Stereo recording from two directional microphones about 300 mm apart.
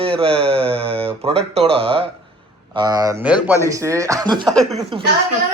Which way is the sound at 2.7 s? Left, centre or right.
Centre.